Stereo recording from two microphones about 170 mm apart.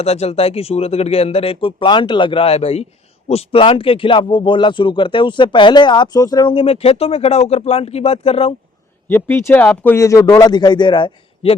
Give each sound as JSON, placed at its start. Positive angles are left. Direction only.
{"t": 0.0, "sound": "speech", "side_deg": 40}
{"t": 9.0, "sound": "speech", "side_deg": 10}